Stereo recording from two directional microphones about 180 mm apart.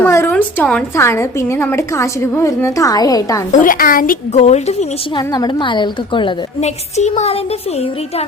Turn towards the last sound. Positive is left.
turn(degrees=40)  # may be behind; listen again after turning